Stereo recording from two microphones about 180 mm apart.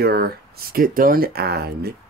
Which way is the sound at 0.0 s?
60° right (ahead or behind).